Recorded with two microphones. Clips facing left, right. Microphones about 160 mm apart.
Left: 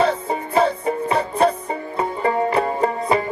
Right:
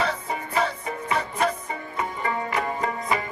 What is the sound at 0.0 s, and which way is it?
Music, 30° left (ahead or behind).